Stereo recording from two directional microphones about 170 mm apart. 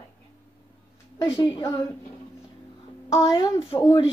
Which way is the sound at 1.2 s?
30° left (ahead or behind).